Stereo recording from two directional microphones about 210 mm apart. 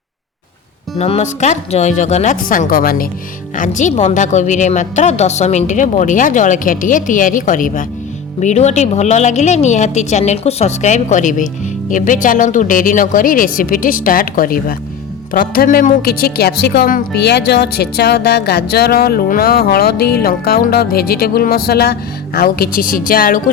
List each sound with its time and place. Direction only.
0.9 s a woman's voice: 30° left (ahead or behind)